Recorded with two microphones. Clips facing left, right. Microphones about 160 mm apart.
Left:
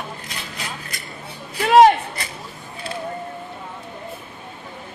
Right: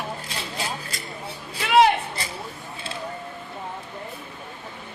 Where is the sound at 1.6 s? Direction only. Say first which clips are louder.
Left 6 dB; 45° left (ahead or behind).